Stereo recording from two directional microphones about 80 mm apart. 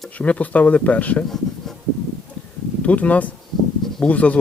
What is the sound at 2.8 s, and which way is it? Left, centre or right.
Speech, centre.